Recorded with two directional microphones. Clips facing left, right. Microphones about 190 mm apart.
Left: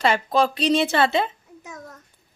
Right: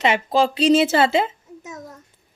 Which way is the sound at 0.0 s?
25° right (ahead or behind).